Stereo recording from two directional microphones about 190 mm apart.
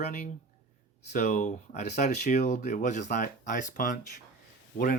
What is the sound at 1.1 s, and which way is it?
Speech, 40° left (ahead or behind).